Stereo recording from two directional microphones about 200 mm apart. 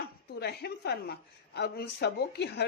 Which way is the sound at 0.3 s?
55° left (ahead or behind).